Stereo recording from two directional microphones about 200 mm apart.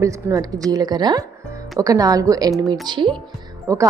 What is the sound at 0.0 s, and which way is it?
A woman's voice, 15° right (ahead or behind).